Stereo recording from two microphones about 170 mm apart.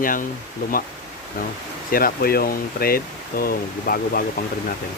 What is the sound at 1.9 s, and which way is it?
Speech, 60° left (ahead or behind).